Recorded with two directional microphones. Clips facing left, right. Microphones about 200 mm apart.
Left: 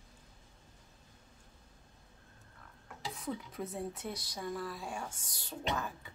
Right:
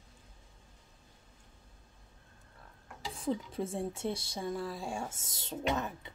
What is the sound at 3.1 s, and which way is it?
Speech, 30° right (ahead or behind).